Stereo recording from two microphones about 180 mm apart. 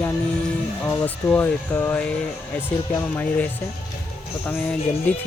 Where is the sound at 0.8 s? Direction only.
10° left (ahead or behind).